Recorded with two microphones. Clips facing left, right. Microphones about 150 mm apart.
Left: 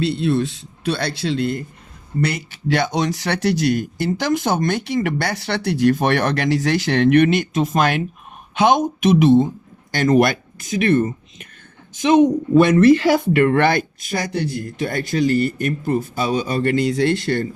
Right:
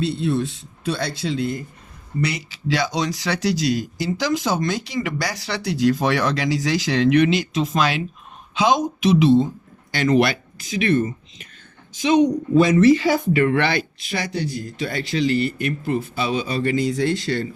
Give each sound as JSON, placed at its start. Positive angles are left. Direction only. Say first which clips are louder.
{"t": 0.0, "sound": "a woman's voice", "louder": "left 3 dB", "side_deg": 75}